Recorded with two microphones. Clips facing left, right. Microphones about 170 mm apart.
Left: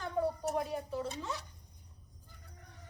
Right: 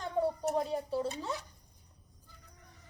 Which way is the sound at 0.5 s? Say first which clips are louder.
Right 3 dB; 30° right (ahead or behind).